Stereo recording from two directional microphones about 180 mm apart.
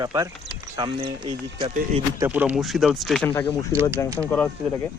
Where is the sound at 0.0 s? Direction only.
25° right (ahead or behind).